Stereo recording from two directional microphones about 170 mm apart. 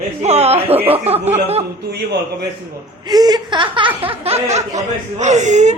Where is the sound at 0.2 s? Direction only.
40° right (ahead or behind).